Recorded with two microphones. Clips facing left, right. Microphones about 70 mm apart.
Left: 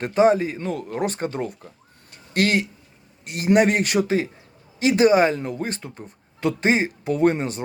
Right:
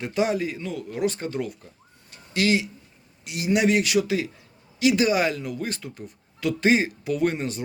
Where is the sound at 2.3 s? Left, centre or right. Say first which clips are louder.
Left 2 dB; left.